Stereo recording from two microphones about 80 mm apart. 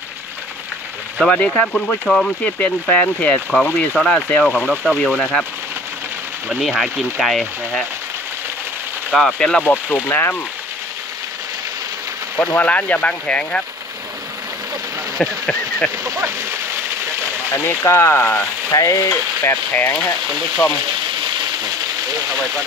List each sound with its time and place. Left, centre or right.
1.2 s speech: centre
2.4 s speech: centre
3.9 s speech: centre
4.6 s speech: centre
5.2 s speech: centre
6.6 s speech: centre
9.1 s speech: centre
9.9 s speech: left
12.5 s speech: centre
15.1 s speech: centre
17.5 s speech: left
18.7 s stir: left
19.4 s speech: left